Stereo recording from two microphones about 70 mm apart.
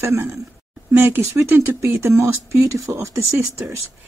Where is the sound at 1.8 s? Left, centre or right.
Right.